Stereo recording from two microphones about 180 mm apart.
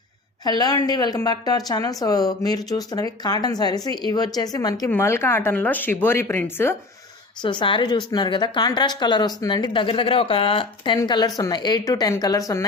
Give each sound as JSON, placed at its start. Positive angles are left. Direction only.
{"t": 0.4, "sound": "a woman's voice", "side_deg": 20}
{"t": 7.4, "sound": "a woman's voice", "side_deg": 25}